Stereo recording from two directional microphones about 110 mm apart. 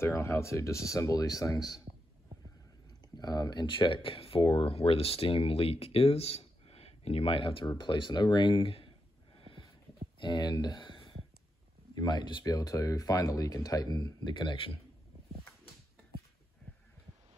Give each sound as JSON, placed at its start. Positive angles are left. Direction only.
{"t": 0.0, "sound": "speech", "side_deg": 25}
{"t": 3.2, "sound": "speech", "side_deg": 40}
{"t": 9.4, "sound": "a sound", "side_deg": 50}
{"t": 10.1, "sound": "speech", "side_deg": 40}
{"t": 12.4, "sound": "speech", "side_deg": 30}